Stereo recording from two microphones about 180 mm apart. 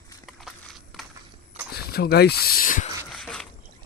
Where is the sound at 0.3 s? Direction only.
Centre (ahead or behind).